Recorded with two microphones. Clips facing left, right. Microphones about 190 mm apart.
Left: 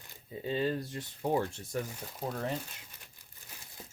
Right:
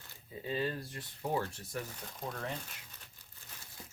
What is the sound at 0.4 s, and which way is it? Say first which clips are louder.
Speech: left 4 dB; 25° left (ahead or behind).